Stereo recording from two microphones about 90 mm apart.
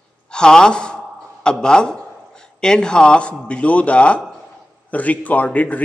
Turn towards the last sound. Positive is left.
turn(degrees=15)  # may be behind; listen again after turning